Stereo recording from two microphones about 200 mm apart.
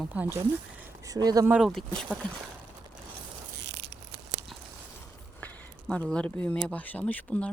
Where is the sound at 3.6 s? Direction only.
60° right (ahead or behind).